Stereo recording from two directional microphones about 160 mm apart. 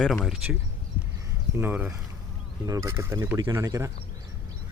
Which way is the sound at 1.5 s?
10° right (ahead or behind).